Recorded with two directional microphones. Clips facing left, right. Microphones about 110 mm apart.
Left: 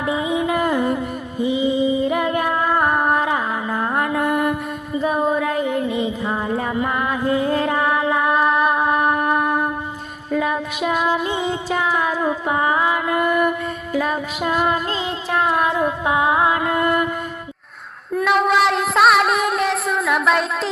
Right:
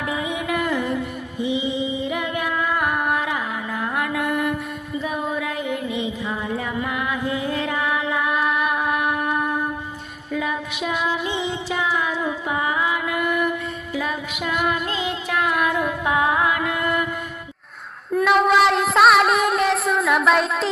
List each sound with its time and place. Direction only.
0.0 s music: 25° left (ahead or behind)
0.6 s music: 45° left (ahead or behind)
10.3 s child singing: 45° left (ahead or behind)
18.1 s music: centre (ahead or behind)